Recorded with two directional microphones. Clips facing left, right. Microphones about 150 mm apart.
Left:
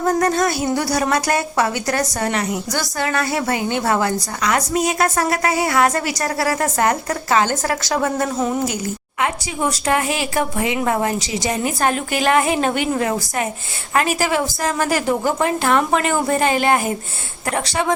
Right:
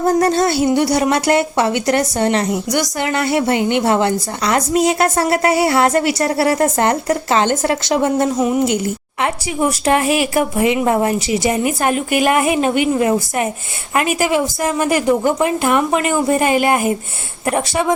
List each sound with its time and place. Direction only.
0.0 s speech: 30° right (ahead or behind)
10.2 s speech: 20° right (ahead or behind)
12.2 s speech: 15° right (ahead or behind)
13.0 s speech: 20° right (ahead or behind)
15.4 s speech: 10° right (ahead or behind)